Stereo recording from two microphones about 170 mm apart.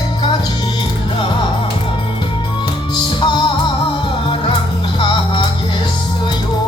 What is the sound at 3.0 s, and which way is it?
Music, 25° left (ahead or behind).